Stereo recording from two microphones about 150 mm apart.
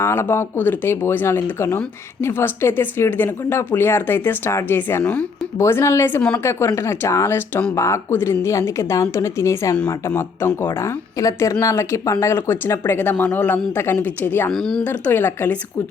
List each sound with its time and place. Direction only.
0.0 s speech: 15° left (ahead or behind)
9.7 s a woman's voice: 10° left (ahead or behind)
14.5 s speech: centre (ahead or behind)
14.8 s speech: 15° left (ahead or behind)